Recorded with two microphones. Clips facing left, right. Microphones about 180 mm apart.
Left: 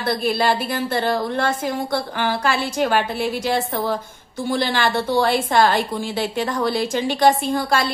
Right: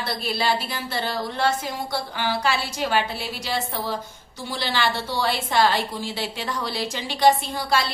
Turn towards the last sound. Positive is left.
turn(degrees=50)  # may be behind; listen again after turning